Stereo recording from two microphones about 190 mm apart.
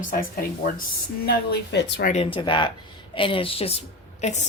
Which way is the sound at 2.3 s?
25° left (ahead or behind).